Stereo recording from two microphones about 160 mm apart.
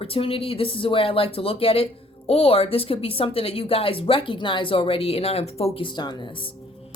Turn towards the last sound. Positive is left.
turn(degrees=25)  # may be behind; listen again after turning